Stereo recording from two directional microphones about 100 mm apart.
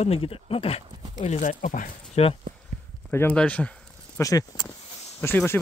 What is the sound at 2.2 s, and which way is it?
Speech, 90° left.